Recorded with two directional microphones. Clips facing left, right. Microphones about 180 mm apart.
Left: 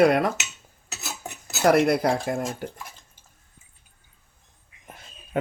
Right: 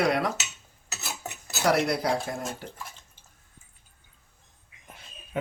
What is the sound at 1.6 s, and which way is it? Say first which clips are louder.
Speech: left 6 dB; 50° left (ahead or behind).